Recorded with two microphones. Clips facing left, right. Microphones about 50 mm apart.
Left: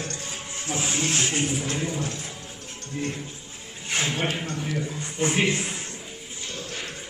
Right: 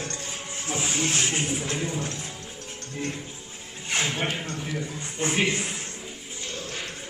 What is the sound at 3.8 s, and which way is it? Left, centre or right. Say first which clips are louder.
A man's voice: left 1 dB; centre.